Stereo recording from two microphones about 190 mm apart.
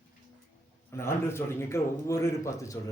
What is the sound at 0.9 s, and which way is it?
A man's voice, 15° left (ahead or behind).